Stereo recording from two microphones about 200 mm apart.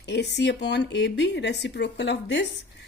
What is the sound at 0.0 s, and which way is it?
A woman's voice, 60° left (ahead or behind).